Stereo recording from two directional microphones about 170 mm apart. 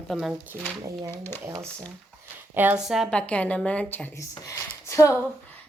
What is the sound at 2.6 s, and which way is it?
Speech, 5° right (ahead or behind).